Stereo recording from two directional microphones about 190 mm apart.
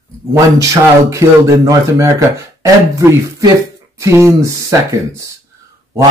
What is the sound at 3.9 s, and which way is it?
Speech, 15° right (ahead or behind).